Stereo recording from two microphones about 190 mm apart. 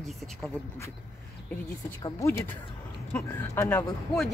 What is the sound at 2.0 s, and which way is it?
Speech, 15° left (ahead or behind).